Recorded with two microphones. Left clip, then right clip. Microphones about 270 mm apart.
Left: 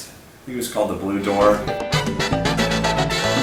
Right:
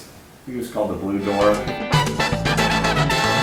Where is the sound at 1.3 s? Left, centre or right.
Centre.